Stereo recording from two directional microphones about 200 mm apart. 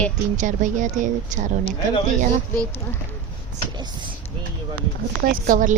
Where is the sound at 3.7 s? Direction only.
20° right (ahead or behind).